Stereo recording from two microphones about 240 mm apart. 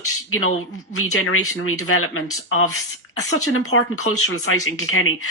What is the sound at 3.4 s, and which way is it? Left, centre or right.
Speech, left.